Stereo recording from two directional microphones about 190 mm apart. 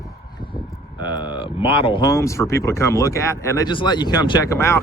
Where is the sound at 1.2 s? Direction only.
25° left (ahead or behind).